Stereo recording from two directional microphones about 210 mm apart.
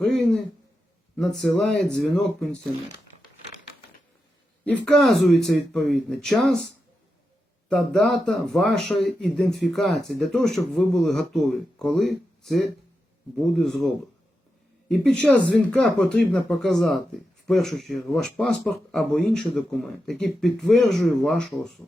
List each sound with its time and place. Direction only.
1.1 s speech: centre (ahead or behind)
4.6 s speech: 5° left (ahead or behind)
7.7 s speech: centre (ahead or behind)